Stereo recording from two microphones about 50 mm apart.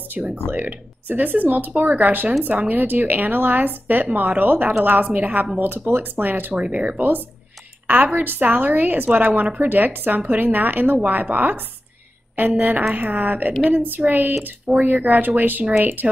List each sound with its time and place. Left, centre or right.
0.2 s speech: right
0.5 s a woman's voice: right
6.5 s speech: right
7.8 s a sound: right
8.2 s a woman's voice: right